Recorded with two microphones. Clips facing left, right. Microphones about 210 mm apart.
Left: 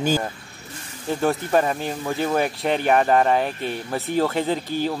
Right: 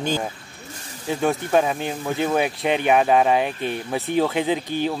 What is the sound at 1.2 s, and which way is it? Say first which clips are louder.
Speech: even; centre (ahead or behind).